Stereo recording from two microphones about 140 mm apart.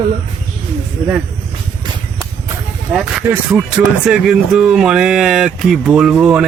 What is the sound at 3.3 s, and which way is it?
Speech, 15° right (ahead or behind).